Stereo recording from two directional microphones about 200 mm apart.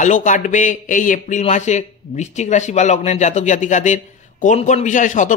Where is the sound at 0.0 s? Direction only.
40° left (ahead or behind).